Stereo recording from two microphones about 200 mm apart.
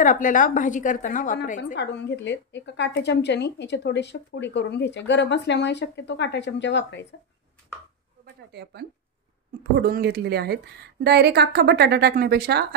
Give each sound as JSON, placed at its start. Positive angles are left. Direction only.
{"t": 0.0, "sound": "a woman's voice", "side_deg": 40}
{"t": 1.8, "sound": "a woman's voice", "side_deg": 60}
{"t": 8.4, "sound": "a woman's voice", "side_deg": -55}